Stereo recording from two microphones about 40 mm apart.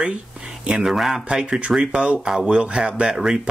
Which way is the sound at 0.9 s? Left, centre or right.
Centre.